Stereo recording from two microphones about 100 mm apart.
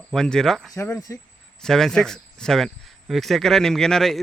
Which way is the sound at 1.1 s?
30° left (ahead or behind).